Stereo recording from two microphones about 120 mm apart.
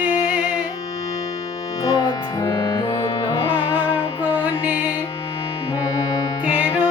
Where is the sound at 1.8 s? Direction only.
30° left (ahead or behind).